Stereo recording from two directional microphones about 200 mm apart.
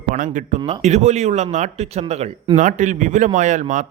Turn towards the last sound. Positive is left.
turn(degrees=-40)  # may be behind; listen again after turning